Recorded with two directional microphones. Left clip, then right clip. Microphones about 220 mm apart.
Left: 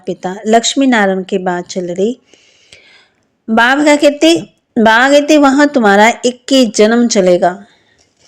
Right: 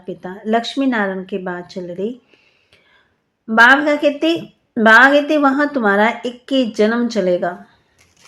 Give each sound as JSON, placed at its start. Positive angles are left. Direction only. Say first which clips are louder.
{"t": 0.0, "sound": "a woman's voice", "louder": "left 9 dB", "side_deg": 35}